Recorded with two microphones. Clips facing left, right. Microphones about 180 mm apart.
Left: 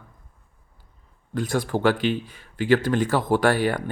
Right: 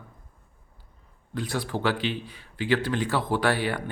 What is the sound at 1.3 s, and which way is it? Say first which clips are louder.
Speech: left 5 dB; 45° left (ahead or behind).